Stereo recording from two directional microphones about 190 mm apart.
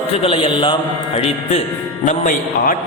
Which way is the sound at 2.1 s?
45° left (ahead or behind).